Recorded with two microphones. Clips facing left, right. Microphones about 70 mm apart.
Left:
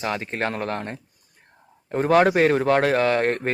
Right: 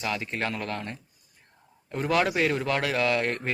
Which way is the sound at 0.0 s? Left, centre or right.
Left.